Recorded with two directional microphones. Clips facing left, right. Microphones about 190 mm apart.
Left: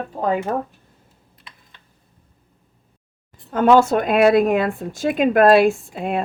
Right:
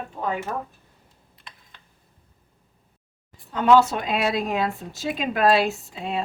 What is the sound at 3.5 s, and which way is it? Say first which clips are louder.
Speech: left 4 dB; 50° left (ahead or behind).